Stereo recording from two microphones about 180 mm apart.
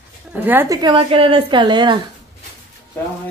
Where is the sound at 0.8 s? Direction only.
30° right (ahead or behind).